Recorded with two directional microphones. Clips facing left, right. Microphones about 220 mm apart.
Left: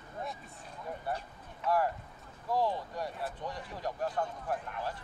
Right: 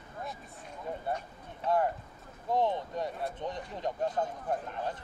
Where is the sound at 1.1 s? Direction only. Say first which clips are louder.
Right 2 dB; 25° right (ahead or behind).